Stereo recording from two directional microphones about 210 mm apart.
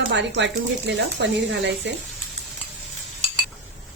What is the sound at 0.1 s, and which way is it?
Speech, 55° right (ahead or behind).